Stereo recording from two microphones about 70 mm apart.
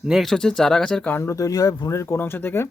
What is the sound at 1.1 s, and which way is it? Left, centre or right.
Speech, left.